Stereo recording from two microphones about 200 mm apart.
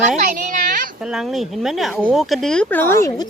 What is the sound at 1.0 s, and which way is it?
Speech, centre (ahead or behind).